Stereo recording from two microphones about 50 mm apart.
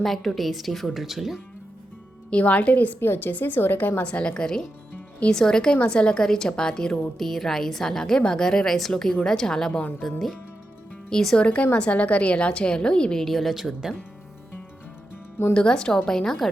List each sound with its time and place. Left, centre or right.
0.0 s a woman's voice: centre
2.3 s a woman's voice: left
3.0 s a woman's voice: left
4.0 s a woman's voice: left; by 11.3 s centre
11.3 s a woman's voice: left
13.1 s a woman's voice: centre
15.5 s a woman's voice: centre